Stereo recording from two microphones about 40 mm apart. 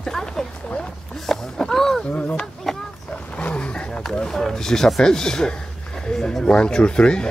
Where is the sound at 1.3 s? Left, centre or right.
Centre.